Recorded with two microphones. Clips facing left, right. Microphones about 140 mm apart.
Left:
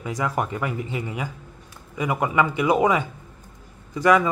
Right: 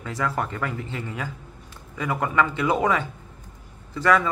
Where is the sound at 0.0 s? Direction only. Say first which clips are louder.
Left 2 dB; 15° left (ahead or behind).